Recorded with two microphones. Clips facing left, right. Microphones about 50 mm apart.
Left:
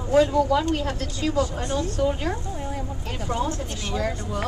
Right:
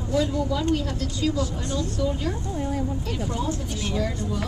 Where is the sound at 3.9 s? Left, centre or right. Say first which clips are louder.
Left 1 dB; left.